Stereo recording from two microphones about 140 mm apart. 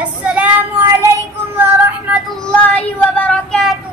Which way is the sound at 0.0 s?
10° right (ahead or behind).